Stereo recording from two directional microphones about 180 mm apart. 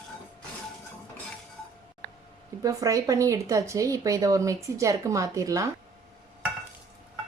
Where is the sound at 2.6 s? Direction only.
20° right (ahead or behind).